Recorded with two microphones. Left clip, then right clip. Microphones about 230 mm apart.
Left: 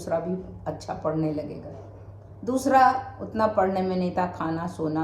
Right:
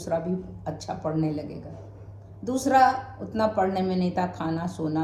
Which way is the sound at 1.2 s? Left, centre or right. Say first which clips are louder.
Left 1 dB; centre.